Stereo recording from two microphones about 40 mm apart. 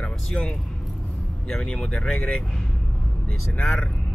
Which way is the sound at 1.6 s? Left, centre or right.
Centre.